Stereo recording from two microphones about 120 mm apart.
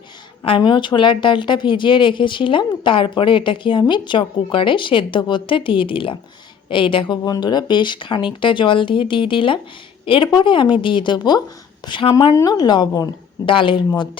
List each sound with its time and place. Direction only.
0.4 s a woman's voice: 45° left (ahead or behind)
12.3 s a woman's voice: 30° left (ahead or behind)
13.4 s a woman's voice: 45° left (ahead or behind)